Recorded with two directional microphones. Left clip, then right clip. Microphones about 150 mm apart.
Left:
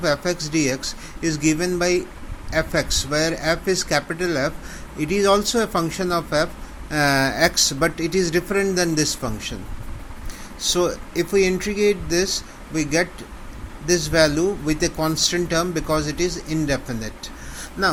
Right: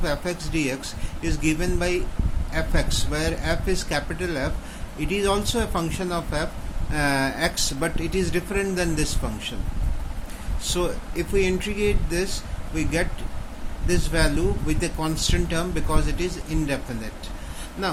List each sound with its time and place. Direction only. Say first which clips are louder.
0.0 s speech: left 6 dB; 35° left (ahead or behind)
10.7 s speech: left 5 dB; 35° left (ahead or behind)